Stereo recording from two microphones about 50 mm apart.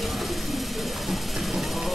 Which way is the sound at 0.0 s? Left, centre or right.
Centre.